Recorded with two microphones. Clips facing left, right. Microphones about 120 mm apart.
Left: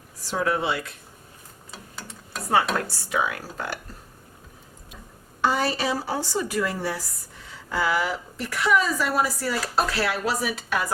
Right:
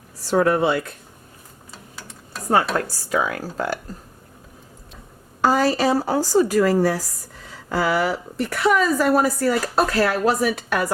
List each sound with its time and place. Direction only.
0.3 s speech: 50° right (ahead or behind)
1.7 s a sound: centre (ahead or behind)
2.8 s speech: 40° right (ahead or behind)
5.4 s speech: 40° right (ahead or behind)
8.4 s speech: 55° right (ahead or behind)